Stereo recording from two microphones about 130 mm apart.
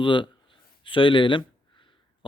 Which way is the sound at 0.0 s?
40° left (ahead or behind).